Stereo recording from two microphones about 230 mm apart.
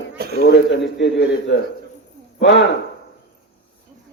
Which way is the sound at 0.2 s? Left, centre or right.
Right.